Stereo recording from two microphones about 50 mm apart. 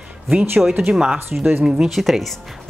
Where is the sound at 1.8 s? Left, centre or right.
Centre.